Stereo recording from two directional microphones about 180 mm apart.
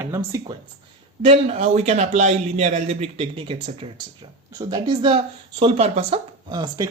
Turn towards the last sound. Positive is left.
turn(degrees=-25)  # may be behind; listen again after turning